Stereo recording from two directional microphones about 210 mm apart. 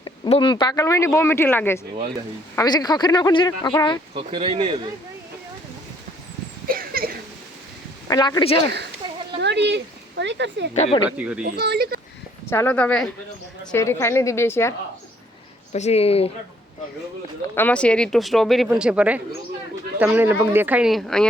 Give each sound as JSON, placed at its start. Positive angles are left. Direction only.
{"t": 0.0, "sound": "speech", "side_deg": 25}
{"t": 4.1, "sound": "speech", "side_deg": -25}
{"t": 6.7, "sound": "a sound", "side_deg": -45}
{"t": 8.0, "sound": "speech", "side_deg": 20}
{"t": 9.4, "sound": "speech", "side_deg": -55}
{"t": 11.2, "sound": "speech", "side_deg": -5}
{"t": 11.4, "sound": "speech", "side_deg": -50}
{"t": 12.5, "sound": "speech", "side_deg": 10}
{"t": 15.7, "sound": "speech", "side_deg": 30}
{"t": 17.5, "sound": "speech", "side_deg": 10}